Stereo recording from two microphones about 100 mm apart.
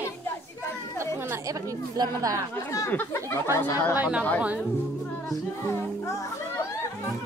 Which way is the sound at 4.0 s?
15° right (ahead or behind).